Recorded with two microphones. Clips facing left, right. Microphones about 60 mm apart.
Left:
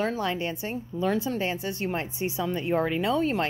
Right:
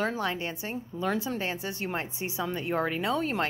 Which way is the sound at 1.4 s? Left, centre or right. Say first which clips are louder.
Left 3 dB; centre.